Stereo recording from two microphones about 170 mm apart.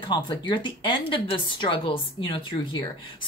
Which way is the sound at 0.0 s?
25° left (ahead or behind).